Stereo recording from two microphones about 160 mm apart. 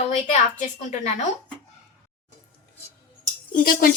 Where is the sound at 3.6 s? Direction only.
65° left (ahead or behind).